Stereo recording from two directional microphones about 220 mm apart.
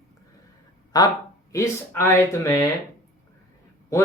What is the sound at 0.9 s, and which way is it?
Speech, 15° left (ahead or behind).